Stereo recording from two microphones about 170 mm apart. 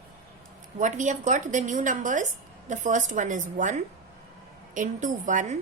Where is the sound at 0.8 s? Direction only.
45° right (ahead or behind).